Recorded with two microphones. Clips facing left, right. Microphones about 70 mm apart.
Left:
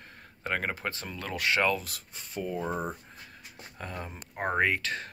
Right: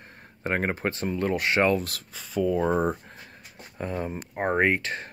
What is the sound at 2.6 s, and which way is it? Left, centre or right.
Speech, right.